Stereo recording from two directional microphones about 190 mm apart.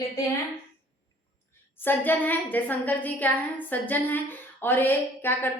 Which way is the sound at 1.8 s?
10° left (ahead or behind).